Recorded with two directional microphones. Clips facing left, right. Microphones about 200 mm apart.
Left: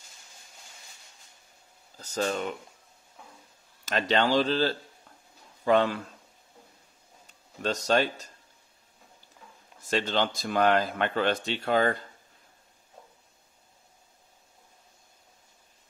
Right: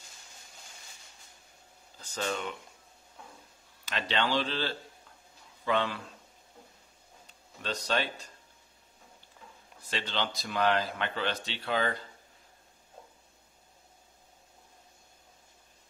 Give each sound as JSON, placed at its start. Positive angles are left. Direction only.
{"t": 2.0, "sound": "speech", "side_deg": 40}
{"t": 3.8, "sound": "speech", "side_deg": 45}
{"t": 7.6, "sound": "speech", "side_deg": 45}
{"t": 9.8, "sound": "speech", "side_deg": 45}